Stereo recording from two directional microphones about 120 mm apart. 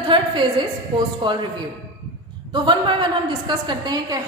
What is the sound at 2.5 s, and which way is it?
A woman's voice, 40° right (ahead or behind).